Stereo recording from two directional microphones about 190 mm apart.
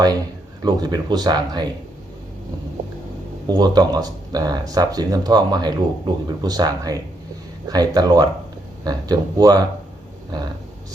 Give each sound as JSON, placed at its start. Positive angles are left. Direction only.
{"t": 0.6, "sound": "speech", "side_deg": -20}
{"t": 3.4, "sound": "speech", "side_deg": -20}